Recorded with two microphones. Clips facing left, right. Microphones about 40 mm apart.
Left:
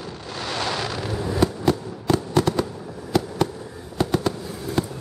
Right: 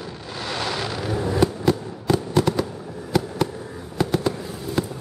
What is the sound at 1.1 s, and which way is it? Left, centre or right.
Fireworks, centre.